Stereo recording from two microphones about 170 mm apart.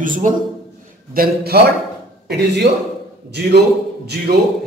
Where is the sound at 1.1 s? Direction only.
65° right (ahead or behind).